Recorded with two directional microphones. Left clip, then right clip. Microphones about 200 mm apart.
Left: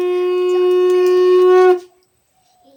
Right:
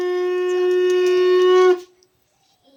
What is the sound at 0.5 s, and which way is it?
Shofar, 35° left (ahead or behind).